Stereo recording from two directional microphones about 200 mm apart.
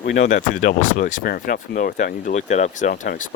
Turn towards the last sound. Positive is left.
turn(degrees=40)  # may be behind; listen again after turning